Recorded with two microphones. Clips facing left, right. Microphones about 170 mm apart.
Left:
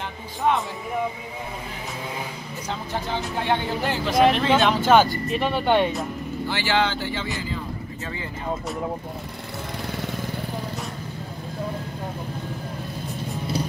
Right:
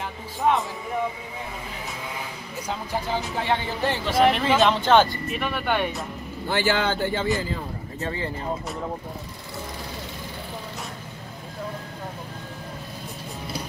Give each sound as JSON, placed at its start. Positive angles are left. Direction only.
{"t": 0.4, "sound": "speech", "side_deg": 0}
{"t": 2.7, "sound": "speech", "side_deg": -5}
{"t": 5.3, "sound": "speech", "side_deg": 30}
{"t": 6.5, "sound": "speech", "side_deg": -50}
{"t": 8.0, "sound": "speech", "side_deg": -35}